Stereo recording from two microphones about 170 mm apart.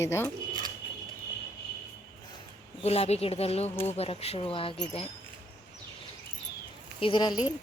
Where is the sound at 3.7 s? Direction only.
15° left (ahead or behind).